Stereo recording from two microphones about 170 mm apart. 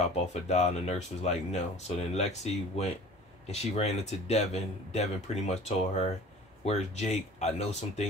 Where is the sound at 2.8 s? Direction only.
35° left (ahead or behind).